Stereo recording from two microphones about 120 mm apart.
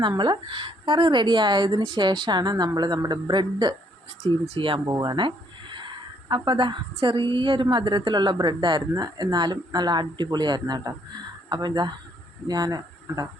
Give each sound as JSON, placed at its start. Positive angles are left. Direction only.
{"t": 0.0, "sound": "speech", "side_deg": -40}
{"t": 4.4, "sound": "speech", "side_deg": -50}
{"t": 4.9, "sound": "speech", "side_deg": -35}